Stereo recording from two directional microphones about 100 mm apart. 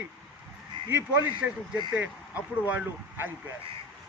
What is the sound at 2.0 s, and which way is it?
A man's voice, 15° right (ahead or behind).